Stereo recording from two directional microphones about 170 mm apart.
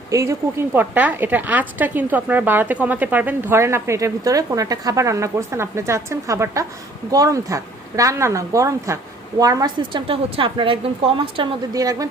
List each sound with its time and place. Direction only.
0.1 s a woman's voice: 15° right (ahead or behind)